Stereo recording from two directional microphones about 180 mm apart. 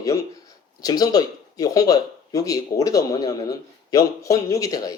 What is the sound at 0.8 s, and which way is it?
Speech, 20° left (ahead or behind).